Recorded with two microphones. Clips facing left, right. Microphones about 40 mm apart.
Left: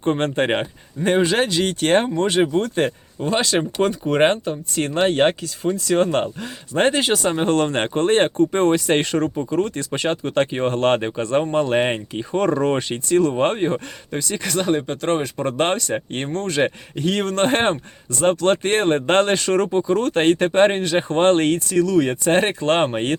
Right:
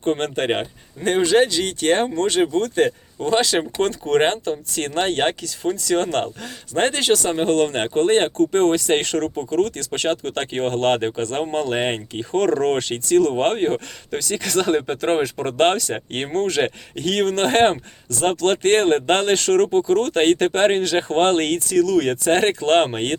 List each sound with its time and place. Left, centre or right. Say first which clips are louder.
0.2 s speech: left 2 dB; centre
1.2 s speech: right 2 dB; left
3.2 s speech: right 1 dB; centre
7.4 s speech: even; left; by 14.8 s centre
14.8 s speech: right 1 dB; centre
19.1 s speech: left 2 dB; left